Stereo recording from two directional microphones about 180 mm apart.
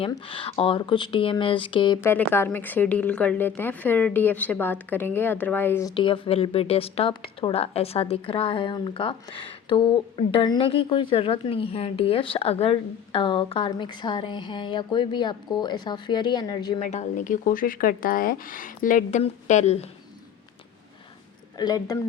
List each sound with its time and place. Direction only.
0.1 s speech: 30° left (ahead or behind)
2.0 s speech: 15° left (ahead or behind)
5.9 s speech: 25° left (ahead or behind)
16.8 s a woman's voice: 40° left (ahead or behind)
21.6 s speech: 20° left (ahead or behind)